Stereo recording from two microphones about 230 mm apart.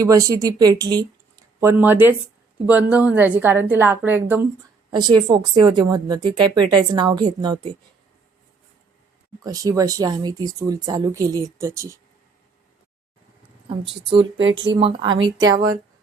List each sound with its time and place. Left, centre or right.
0.0 s speech: centre
9.4 s speech: centre
14.1 s speech: right